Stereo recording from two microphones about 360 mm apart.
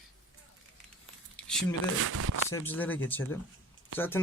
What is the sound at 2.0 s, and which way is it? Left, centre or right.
Speech, right.